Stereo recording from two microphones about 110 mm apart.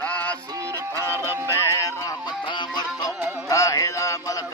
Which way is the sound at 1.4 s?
30° left (ahead or behind).